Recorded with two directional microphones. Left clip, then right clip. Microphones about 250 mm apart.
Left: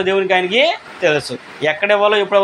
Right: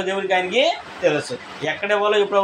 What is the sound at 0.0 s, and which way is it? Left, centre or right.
A man's voice, left.